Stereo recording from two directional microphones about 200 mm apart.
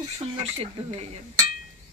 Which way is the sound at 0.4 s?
30° right (ahead or behind).